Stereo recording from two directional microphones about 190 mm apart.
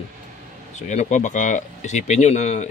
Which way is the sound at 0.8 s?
40° left (ahead or behind).